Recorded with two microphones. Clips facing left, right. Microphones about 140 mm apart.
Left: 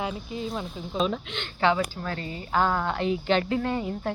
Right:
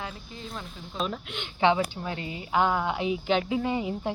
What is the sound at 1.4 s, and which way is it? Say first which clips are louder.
Speech: right 1 dB; 20° right (ahead or behind).